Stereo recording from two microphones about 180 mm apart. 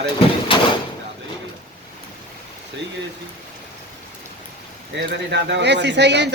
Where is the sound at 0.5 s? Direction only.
30° left (ahead or behind).